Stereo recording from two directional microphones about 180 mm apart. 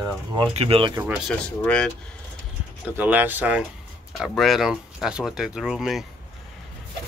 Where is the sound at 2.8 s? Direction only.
10° right (ahead or behind).